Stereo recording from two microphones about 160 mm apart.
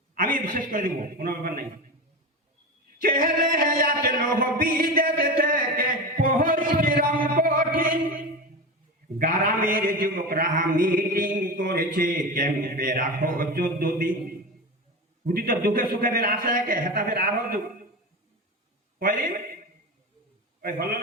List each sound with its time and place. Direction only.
0.1 s a man's voice: 60° right (ahead or behind)
3.0 s music: 65° right (ahead or behind)
9.1 s a man's voice: 60° right (ahead or behind)
18.9 s a man's voice: 60° right (ahead or behind)
20.6 s a man's voice: 65° right (ahead or behind)